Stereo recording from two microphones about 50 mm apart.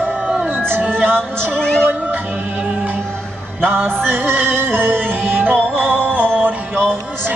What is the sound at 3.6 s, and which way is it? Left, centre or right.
Music, right.